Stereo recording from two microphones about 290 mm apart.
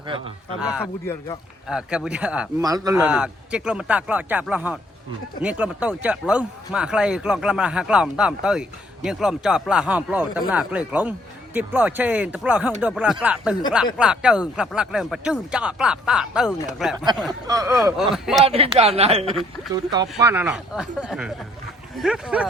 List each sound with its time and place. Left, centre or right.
0.6 s speech: centre
1.0 s speech: centre
1.6 s speech: centre
17.4 s speech: centre
17.8 s speech: centre
18.4 s a woman's voice: centre